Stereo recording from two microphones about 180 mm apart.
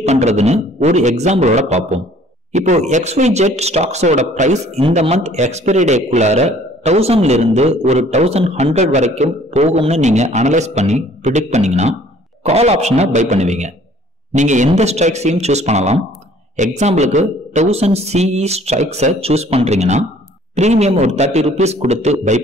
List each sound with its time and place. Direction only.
0.0 s speech: 40° right (ahead or behind)